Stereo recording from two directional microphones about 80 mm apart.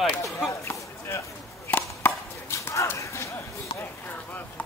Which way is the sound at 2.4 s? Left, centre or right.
Left.